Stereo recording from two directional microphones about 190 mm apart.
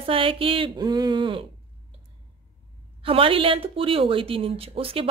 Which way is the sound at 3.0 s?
30° right (ahead or behind).